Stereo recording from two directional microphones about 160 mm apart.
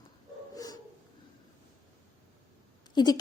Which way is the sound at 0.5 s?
25° left (ahead or behind).